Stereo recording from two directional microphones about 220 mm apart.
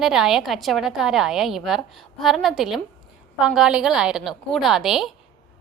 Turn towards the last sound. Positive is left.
turn(degrees=0)  # may be behind; listen again after turning